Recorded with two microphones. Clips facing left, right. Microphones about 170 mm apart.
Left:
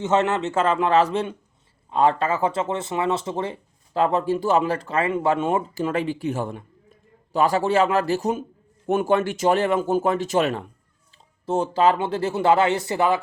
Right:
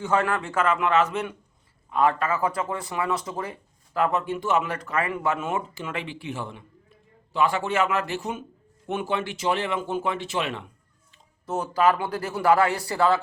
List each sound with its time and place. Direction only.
0.0 s a man's voice: 20° left (ahead or behind); by 10.7 s 40° left (ahead or behind)
11.4 s speech: 25° left (ahead or behind)